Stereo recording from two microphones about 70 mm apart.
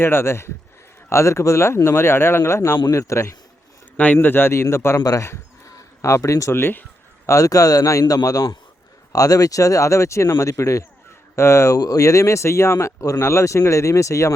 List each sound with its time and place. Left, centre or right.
0.0 s speech: left
3.9 s speech: left
4.9 s speech: left
5.2 s a sound: left
6.5 s speech: left
7.3 s a man's voice: left
11.8 s speech: left